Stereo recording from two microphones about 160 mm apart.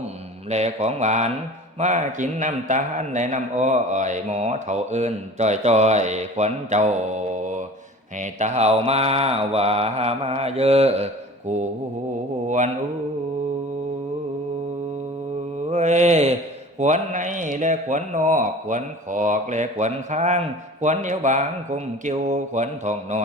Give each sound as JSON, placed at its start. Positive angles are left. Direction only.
{"t": 0.5, "sound": "a man's voice", "side_deg": -45}
{"t": 8.2, "sound": "mantra", "side_deg": -45}
{"t": 15.7, "sound": "mantra", "side_deg": -45}
{"t": 16.8, "sound": "a man's voice", "side_deg": -50}